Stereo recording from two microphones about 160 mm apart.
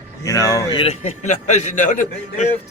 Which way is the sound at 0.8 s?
45° left (ahead or behind).